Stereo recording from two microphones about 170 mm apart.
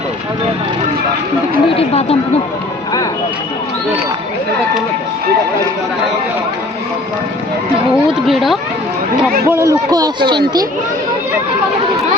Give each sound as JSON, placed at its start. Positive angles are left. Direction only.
{"t": 1.7, "sound": "a sound", "side_deg": 35}
{"t": 8.3, "sound": "speech", "side_deg": 0}
{"t": 9.5, "sound": "a man's voice", "side_deg": -15}